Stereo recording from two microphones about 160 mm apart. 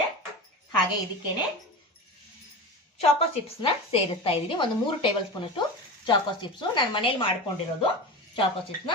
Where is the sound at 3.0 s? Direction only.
40° left (ahead or behind).